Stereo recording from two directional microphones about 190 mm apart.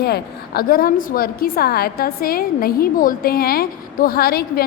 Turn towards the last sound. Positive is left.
turn(degrees=55)  # may be behind; listen again after turning